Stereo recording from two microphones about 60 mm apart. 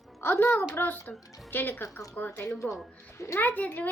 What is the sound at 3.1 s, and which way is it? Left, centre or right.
Speech, left.